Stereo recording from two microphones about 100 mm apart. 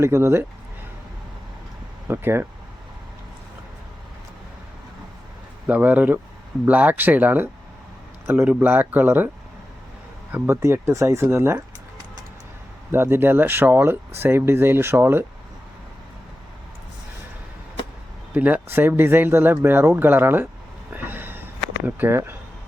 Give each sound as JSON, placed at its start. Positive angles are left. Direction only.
{"t": 0.0, "sound": "speech", "side_deg": -25}
{"t": 2.0, "sound": "speech", "side_deg": -20}
{"t": 5.6, "sound": "speech", "side_deg": -15}
{"t": 10.3, "sound": "speech", "side_deg": -25}
{"t": 12.9, "sound": "speech", "side_deg": -20}
{"t": 18.3, "sound": "speech", "side_deg": -20}
{"t": 20.9, "sound": "a sound", "side_deg": -20}
{"t": 21.8, "sound": "speech", "side_deg": -20}